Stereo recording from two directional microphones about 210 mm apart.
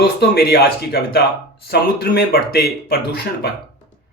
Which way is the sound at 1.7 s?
50° left (ahead or behind).